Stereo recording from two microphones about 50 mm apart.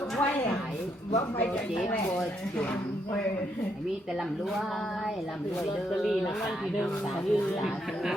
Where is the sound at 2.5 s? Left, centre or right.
Left.